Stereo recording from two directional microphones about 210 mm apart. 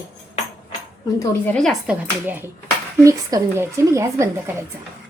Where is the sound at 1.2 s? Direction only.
10° left (ahead or behind).